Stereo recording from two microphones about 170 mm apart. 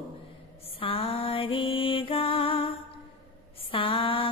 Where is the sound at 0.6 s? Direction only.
35° left (ahead or behind).